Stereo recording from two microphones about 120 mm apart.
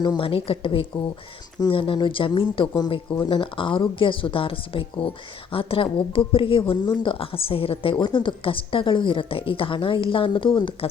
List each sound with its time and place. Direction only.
0.0 s speech: 40° left (ahead or behind)